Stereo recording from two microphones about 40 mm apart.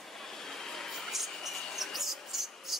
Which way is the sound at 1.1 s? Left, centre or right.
Centre.